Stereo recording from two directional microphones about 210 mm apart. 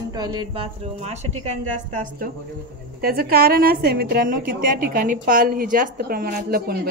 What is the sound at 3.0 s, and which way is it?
A woman's voice, 45° right (ahead or behind).